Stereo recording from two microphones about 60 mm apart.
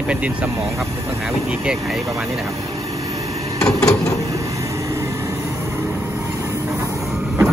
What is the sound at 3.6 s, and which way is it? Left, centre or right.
Drawer open or close, centre.